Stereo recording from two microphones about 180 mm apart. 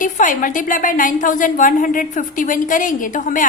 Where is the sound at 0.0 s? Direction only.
50° left (ahead or behind).